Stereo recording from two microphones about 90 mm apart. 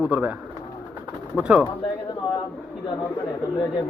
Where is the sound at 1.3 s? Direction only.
10° right (ahead or behind).